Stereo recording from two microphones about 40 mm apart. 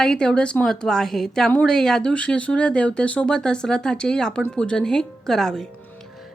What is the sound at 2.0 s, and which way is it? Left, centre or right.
A woman's voice, left.